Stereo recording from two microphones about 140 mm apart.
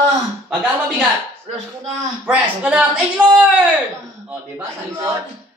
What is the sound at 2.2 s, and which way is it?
Speech, 10° right (ahead or behind).